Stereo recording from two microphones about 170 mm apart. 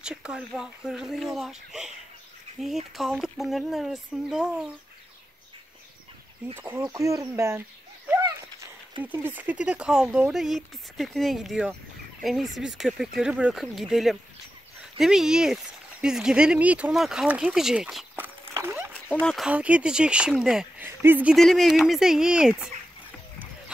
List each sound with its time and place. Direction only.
0.0 s speech: 5° right (ahead or behind)
6.5 s speech: 15° right (ahead or behind)
9.0 s speech: 10° right (ahead or behind)
18.5 s dog: 15° right (ahead or behind)
19.2 s speech: centre (ahead or behind)
21.4 s speech: centre (ahead or behind)